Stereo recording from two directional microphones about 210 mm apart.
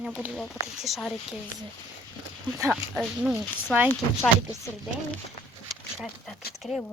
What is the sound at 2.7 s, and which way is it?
Speech, centre (ahead or behind).